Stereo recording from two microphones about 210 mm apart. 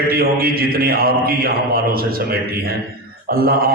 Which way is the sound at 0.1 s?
45° right (ahead or behind).